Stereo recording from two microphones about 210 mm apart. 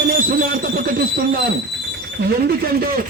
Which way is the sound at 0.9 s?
45° right (ahead or behind).